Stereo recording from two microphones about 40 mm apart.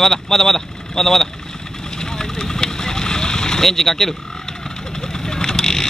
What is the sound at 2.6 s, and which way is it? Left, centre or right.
Vehicle, centre.